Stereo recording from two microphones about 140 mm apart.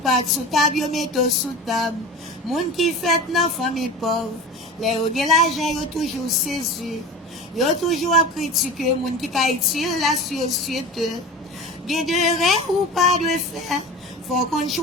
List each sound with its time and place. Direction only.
0.3 s speech: centre (ahead or behind)